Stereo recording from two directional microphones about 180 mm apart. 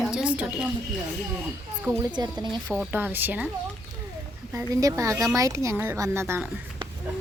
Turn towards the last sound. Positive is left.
turn(degrees=-15)  # may be behind; listen again after turning